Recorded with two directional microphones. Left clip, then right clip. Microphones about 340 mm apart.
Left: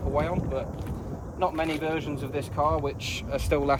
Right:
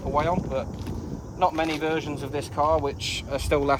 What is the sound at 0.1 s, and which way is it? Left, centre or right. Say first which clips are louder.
Speech: right 4 dB; centre.